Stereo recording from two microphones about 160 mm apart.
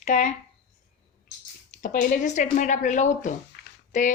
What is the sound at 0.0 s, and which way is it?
Speech, 50° left (ahead or behind).